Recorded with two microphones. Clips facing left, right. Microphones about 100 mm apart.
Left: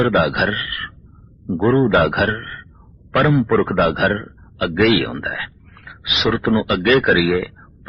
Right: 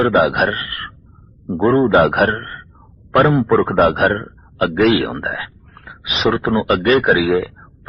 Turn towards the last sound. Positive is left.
turn(degrees=-25)  # may be behind; listen again after turning